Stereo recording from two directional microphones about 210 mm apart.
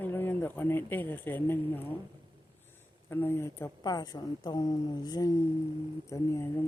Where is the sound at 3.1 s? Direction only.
10° left (ahead or behind).